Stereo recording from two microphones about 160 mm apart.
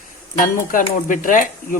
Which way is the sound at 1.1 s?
55° left (ahead or behind).